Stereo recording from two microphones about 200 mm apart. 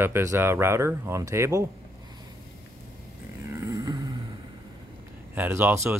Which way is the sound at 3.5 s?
15° right (ahead or behind).